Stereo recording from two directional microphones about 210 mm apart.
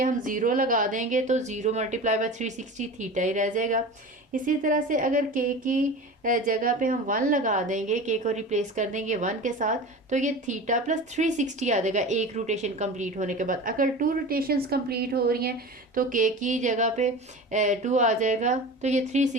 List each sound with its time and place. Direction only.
0.0 s a woman's voice: 40° right (ahead or behind)